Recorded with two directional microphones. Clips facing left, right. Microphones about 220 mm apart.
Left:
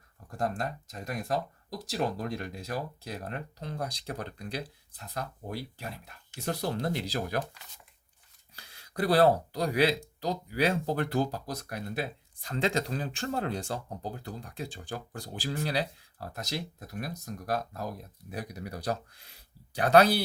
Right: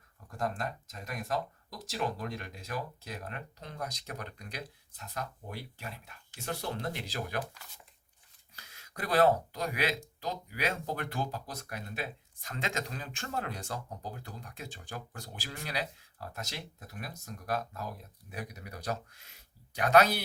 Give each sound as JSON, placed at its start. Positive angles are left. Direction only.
{"t": 0.3, "sound": "speech", "side_deg": 35}
{"t": 8.5, "sound": "speech", "side_deg": 30}